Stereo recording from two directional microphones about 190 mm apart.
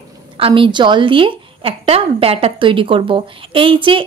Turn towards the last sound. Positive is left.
turn(degrees=-25)  # may be behind; listen again after turning